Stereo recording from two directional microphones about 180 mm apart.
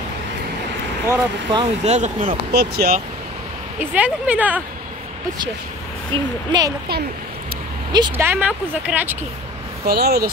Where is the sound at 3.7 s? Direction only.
10° right (ahead or behind).